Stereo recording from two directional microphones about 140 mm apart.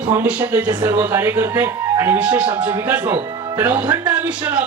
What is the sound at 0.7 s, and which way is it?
A man's voice, 20° right (ahead or behind).